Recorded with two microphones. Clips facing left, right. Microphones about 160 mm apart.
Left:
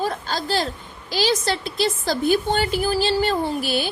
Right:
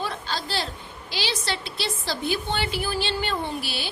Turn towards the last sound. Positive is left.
turn(degrees=45)  # may be behind; listen again after turning